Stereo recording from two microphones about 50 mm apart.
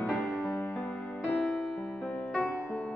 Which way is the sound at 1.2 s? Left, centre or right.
Centre.